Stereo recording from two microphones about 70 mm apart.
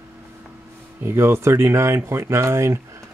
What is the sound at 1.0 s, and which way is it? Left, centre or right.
Speech, right.